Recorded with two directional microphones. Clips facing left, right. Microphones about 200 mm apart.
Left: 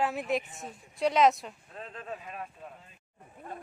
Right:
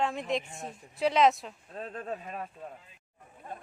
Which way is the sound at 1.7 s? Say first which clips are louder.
Right 5 dB; 40° right (ahead or behind).